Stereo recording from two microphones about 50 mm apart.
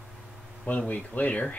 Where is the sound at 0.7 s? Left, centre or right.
Left.